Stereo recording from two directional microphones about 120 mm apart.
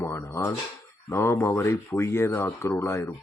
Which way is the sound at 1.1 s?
20° left (ahead or behind).